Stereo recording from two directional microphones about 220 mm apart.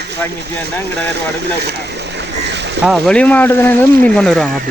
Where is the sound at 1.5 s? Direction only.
50° right (ahead or behind).